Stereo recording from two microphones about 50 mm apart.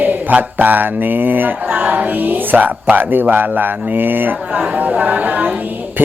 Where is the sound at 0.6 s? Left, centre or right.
Right.